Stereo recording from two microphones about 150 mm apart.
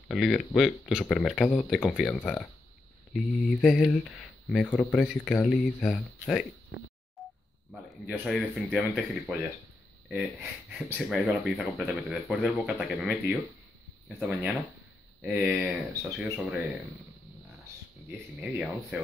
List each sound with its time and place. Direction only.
0.1 s speech: centre (ahead or behind)
7.2 s telephone dialing: centre (ahead or behind)
8.1 s speech: centre (ahead or behind)
11.1 s speech: centre (ahead or behind)
16.2 s speech: 5° right (ahead or behind)
18.4 s speech: 5° right (ahead or behind)